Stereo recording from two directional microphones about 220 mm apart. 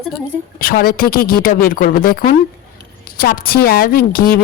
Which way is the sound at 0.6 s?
40° left (ahead or behind).